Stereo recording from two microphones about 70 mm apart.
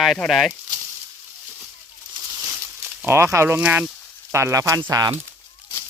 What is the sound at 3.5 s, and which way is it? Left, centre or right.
Speech, right.